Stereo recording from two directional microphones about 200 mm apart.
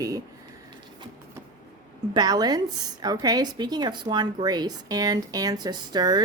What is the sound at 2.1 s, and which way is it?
A woman's voice, 20° right (ahead or behind).